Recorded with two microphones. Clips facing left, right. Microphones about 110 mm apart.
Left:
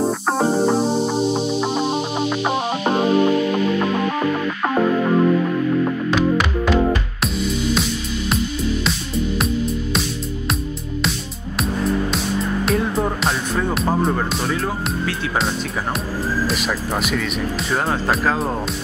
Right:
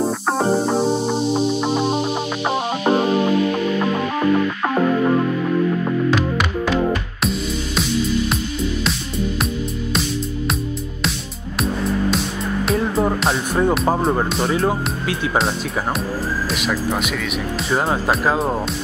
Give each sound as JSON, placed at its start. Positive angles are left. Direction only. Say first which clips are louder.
{"t": 0.0, "sound": "music", "louder": "even", "side_deg": 0}
{"t": 5.9, "sound": "music", "louder": "even", "side_deg": 0}
{"t": 11.8, "sound": "music", "louder": "even", "side_deg": 0}
{"t": 13.6, "sound": "music", "louder": "right 6 dB", "side_deg": -20}
{"t": 17.6, "sound": "speech", "louder": "right 2 dB", "side_deg": -5}